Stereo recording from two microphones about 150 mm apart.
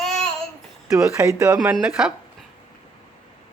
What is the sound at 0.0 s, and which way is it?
Child singing, 5° left (ahead or behind).